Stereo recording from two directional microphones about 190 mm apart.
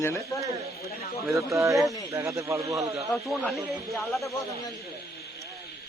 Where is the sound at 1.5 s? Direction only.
15° right (ahead or behind).